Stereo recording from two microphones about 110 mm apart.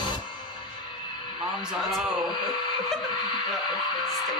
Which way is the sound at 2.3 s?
45° left (ahead or behind).